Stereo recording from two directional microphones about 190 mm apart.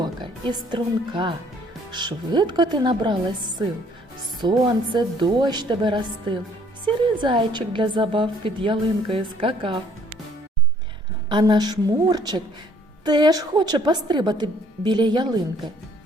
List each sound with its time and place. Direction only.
0.0 s a woman's voice: 25° right (ahead or behind)
11.3 s a woman's voice: 25° right (ahead or behind)